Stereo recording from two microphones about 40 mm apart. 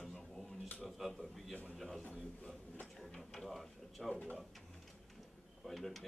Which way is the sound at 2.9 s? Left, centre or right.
Centre.